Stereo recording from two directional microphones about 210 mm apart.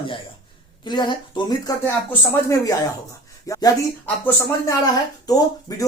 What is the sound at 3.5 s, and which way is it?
Speech, 15° left (ahead or behind).